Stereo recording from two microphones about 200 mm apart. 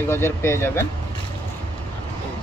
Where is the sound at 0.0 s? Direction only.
10° left (ahead or behind).